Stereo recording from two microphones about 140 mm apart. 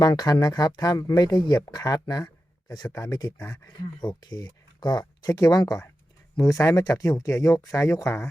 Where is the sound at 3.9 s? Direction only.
30° left (ahead or behind).